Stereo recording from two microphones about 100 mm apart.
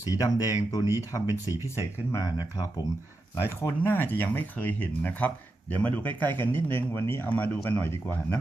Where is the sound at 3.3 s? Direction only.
25° left (ahead or behind).